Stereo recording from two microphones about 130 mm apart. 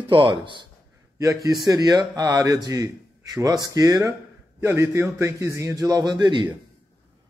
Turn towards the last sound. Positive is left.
turn(degrees=-35)  # may be behind; listen again after turning